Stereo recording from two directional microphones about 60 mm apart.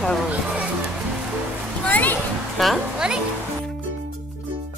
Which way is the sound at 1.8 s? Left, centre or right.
Left.